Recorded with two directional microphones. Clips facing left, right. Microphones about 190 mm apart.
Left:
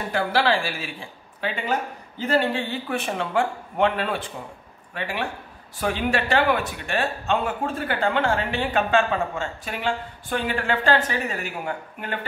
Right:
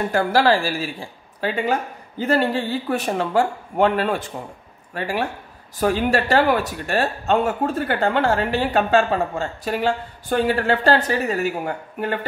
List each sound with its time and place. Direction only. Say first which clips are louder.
0.1 s speech: right 3 dB; 45° right (ahead or behind)